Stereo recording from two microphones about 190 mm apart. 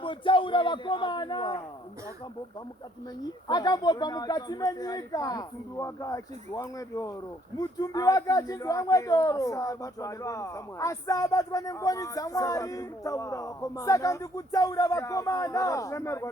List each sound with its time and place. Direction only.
0.0 s a man's voice: 25° left (ahead or behind)
3.2 s speech: 20° left (ahead or behind)